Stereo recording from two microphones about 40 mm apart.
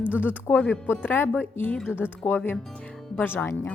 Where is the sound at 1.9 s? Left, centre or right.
Left.